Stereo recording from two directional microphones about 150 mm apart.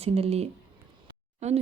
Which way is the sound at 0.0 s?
40° right (ahead or behind).